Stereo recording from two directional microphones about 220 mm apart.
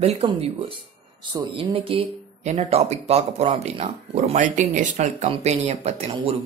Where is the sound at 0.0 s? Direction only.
25° right (ahead or behind).